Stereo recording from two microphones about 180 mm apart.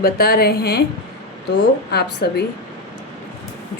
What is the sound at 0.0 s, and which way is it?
Speech, 60° left (ahead or behind).